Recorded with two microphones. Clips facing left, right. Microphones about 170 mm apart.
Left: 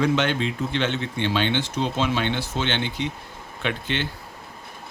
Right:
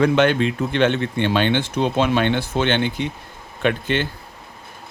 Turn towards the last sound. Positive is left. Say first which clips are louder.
# right 6 dB
turn(degrees=-50)  # may be behind; listen again after turning